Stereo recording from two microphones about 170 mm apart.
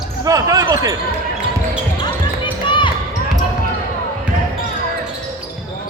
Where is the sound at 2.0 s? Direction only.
30° left (ahead or behind).